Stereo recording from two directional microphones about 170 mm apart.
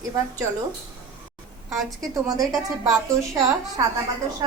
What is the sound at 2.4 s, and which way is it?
A woman's voice, 20° right (ahead or behind).